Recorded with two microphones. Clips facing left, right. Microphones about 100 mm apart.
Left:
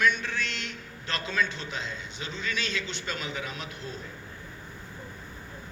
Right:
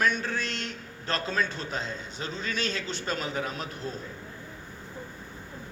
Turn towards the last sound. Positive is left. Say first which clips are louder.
# right 3 dB
turn(degrees=-40)  # may be behind; listen again after turning